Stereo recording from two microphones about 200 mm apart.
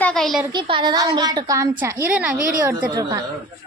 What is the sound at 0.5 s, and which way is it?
A woman's voice, 25° right (ahead or behind).